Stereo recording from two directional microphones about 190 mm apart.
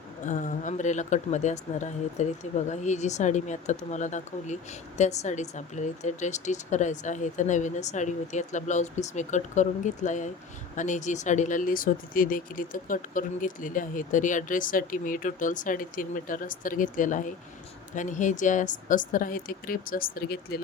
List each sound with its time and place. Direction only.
0.3 s a woman's voice: 40° left (ahead or behind)